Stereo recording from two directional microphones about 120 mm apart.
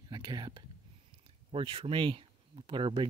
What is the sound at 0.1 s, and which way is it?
Speech, 35° right (ahead or behind).